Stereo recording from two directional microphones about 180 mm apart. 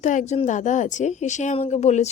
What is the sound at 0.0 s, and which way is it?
A woman's voice, 45° left (ahead or behind).